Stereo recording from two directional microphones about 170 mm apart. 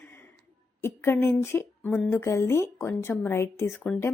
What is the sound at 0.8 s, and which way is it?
A woman's voice, 15° left (ahead or behind).